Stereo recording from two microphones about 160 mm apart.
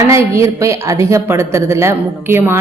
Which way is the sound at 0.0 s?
15° right (ahead or behind).